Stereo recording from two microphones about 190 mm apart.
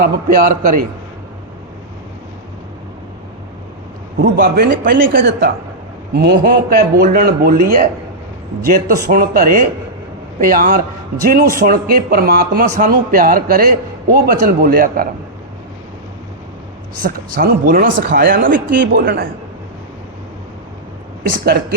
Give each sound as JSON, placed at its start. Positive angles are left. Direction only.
{"t": 0.0, "sound": "a man's voice", "side_deg": -45}
{"t": 4.2, "sound": "a man's voice", "side_deg": -55}
{"t": 9.0, "sound": "a man's voice", "side_deg": -50}
{"t": 17.0, "sound": "a man's voice", "side_deg": -50}
{"t": 21.2, "sound": "a man's voice", "side_deg": -50}